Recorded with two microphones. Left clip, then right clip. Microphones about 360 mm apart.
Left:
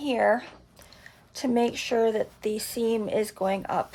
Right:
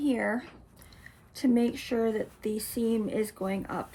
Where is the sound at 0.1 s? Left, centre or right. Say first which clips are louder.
Left 7 dB; left.